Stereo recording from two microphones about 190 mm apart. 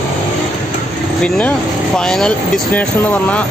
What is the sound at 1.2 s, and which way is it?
Speech, 5° left (ahead or behind).